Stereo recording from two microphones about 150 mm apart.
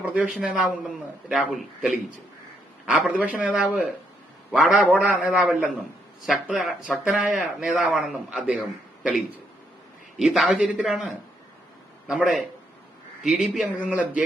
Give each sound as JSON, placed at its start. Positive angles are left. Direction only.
{"t": 0.0, "sound": "a man's voice", "side_deg": -10}